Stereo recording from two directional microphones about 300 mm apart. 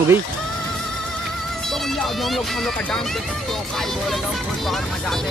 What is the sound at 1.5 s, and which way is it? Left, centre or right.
Speech, centre.